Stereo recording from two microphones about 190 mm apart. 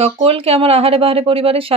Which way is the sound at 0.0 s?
30° right (ahead or behind).